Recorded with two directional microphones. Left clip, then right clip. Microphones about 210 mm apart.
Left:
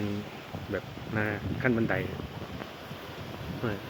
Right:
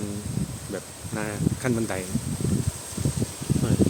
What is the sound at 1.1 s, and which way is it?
Speech, 15° right (ahead or behind).